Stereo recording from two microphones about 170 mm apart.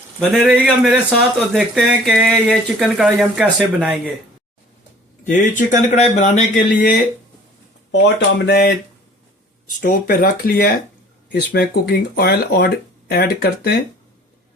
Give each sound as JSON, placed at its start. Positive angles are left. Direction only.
{"t": 0.2, "sound": "speech", "side_deg": 0}
{"t": 5.2, "sound": "speech", "side_deg": 50}
{"t": 7.9, "sound": "speech", "side_deg": 80}
{"t": 9.8, "sound": "speech", "side_deg": 55}
{"t": 11.3, "sound": "speech", "side_deg": 70}